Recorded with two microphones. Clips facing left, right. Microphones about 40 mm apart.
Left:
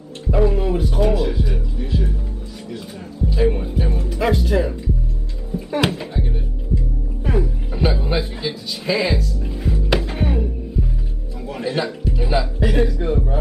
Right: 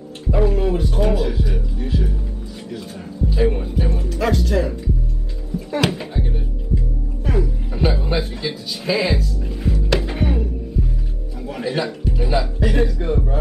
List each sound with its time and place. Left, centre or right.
0.3 s music: centre
2.7 s speech: centre
4.1 s speech: centre
5.5 s music: left
5.9 s music: centre
6.7 s music: left
7.3 s music: centre
8.1 s speech: centre
9.9 s music: centre
11.4 s speech: centre